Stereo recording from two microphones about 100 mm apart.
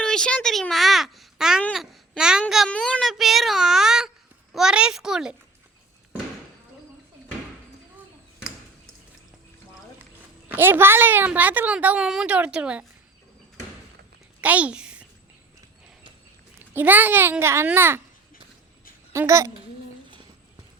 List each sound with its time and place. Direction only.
0.0 s a child's voice: 5° left (ahead or behind)
2.6 s a child's voice: 10° left (ahead or behind); by 5.4 s 5° right (ahead or behind)
10.5 s a child's voice: 20° right (ahead or behind)
14.4 s a child's voice: 15° right (ahead or behind)
16.7 s speech: 20° right (ahead or behind)
19.1 s speech: 30° right (ahead or behind)